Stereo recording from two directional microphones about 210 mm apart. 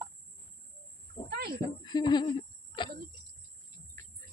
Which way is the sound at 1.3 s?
50° right (ahead or behind).